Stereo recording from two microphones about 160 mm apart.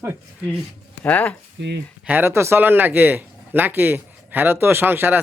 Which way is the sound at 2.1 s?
15° right (ahead or behind).